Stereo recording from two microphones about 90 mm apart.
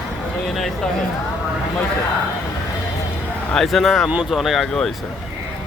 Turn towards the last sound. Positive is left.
turn(degrees=0)  # may be behind; listen again after turning